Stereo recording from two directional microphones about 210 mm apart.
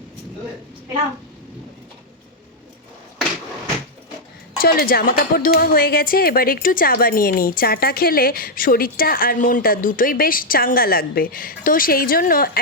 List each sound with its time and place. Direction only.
4.5 s speech: 45° left (ahead or behind)